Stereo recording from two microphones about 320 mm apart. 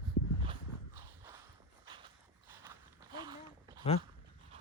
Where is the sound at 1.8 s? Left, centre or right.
Centre.